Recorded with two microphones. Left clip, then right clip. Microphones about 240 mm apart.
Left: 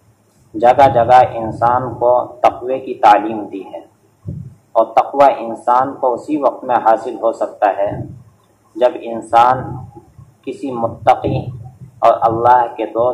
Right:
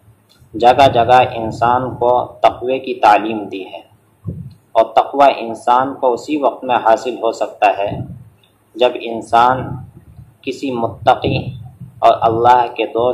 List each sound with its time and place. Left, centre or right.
0.6 s a man's voice: right
4.7 s a man's voice: right
10.6 s a man's voice: right